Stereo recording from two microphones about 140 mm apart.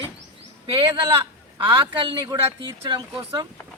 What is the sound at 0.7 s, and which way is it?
Speech, 40° right (ahead or behind).